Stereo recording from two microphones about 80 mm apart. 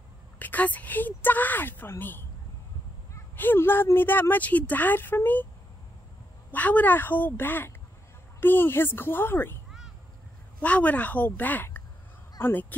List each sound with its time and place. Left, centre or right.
0.4 s speech: left
3.3 s speech: left
6.5 s speech: left
10.6 s speech: centre